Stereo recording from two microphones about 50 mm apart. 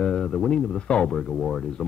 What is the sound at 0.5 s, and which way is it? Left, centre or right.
Speech, centre.